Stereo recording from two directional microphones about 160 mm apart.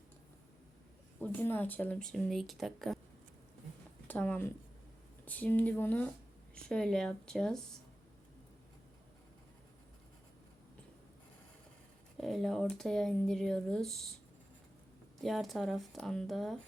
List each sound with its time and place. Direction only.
1.2 s speech: 10° left (ahead or behind)
4.1 s speech: 10° left (ahead or behind)
12.1 s speech: centre (ahead or behind)
15.2 s speech: centre (ahead or behind)